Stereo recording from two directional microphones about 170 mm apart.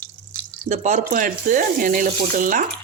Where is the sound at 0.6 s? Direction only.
45° right (ahead or behind).